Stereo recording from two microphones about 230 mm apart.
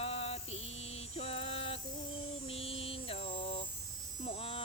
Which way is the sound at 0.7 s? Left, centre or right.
Left.